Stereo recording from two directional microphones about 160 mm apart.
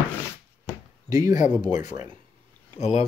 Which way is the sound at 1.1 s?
25° right (ahead or behind).